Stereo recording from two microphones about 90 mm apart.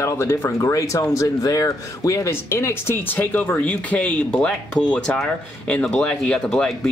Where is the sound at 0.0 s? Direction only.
30° left (ahead or behind).